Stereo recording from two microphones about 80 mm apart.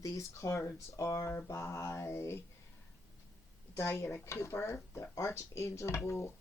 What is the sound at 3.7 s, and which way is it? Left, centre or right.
Speech, left.